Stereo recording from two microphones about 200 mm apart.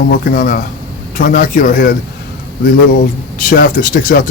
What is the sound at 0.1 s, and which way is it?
Speech, 45° left (ahead or behind).